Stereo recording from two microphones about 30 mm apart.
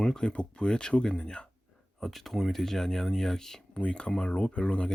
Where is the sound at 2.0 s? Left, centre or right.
Centre.